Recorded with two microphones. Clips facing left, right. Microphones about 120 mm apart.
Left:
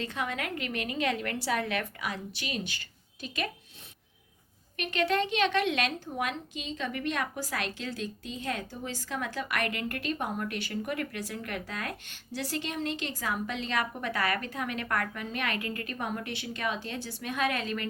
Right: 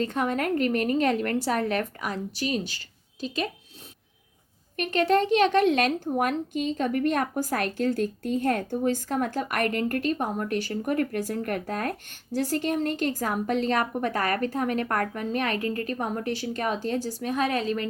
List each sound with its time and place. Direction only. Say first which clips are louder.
0.0 s a woman's voice: right 8 dB; 45° right (ahead or behind)
4.8 s a woman's voice: right 6 dB; 40° right (ahead or behind)